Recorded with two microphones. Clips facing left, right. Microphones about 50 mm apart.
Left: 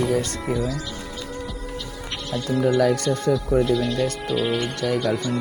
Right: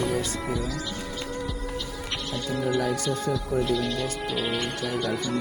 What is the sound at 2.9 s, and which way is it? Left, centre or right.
Speech, left.